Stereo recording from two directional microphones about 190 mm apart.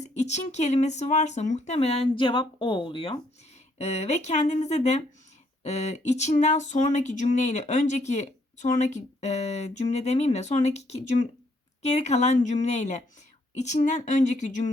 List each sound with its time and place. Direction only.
0.0 s speech: 35° left (ahead or behind)